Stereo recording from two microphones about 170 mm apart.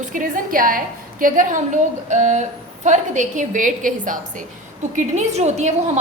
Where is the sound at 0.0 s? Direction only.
50° right (ahead or behind).